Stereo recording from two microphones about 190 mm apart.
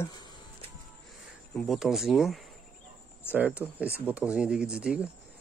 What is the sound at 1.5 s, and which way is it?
Speech, centre (ahead or behind).